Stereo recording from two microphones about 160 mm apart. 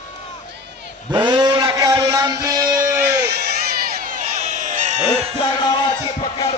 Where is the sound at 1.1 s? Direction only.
30° right (ahead or behind).